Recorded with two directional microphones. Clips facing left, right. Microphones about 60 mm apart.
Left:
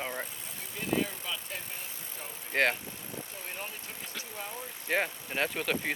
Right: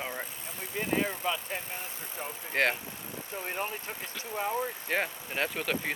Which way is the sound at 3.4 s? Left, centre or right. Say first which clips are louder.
Right 6 dB; right.